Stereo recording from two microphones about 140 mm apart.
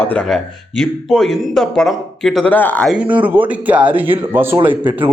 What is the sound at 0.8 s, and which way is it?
A man's voice, 5° left (ahead or behind).